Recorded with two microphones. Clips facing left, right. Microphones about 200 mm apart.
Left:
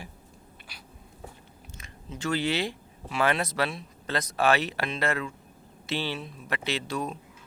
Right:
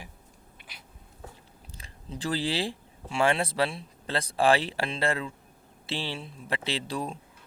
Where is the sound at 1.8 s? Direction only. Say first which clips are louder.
Left 1 dB; 35° right (ahead or behind).